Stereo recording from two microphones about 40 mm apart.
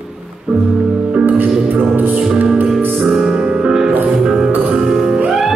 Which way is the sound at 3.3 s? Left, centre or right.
Right.